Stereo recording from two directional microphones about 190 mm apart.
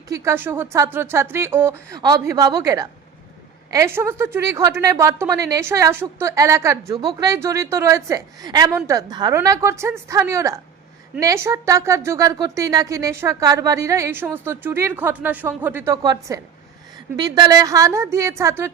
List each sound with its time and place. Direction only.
0.1 s a woman's voice: 15° right (ahead or behind)